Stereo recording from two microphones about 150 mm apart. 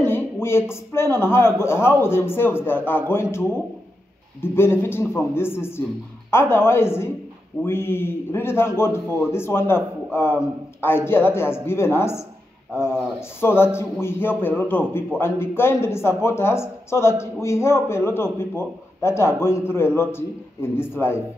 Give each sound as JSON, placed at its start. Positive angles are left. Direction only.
{"t": 0.0, "sound": "a man's voice", "side_deg": 15}
{"t": 13.4, "sound": "a man's voice", "side_deg": 15}